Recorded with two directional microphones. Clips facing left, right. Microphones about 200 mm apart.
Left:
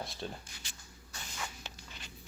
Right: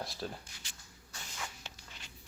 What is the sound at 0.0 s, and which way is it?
Speech, centre (ahead or behind).